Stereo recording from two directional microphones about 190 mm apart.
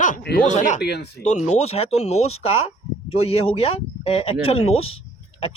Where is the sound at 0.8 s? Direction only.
60° left (ahead or behind).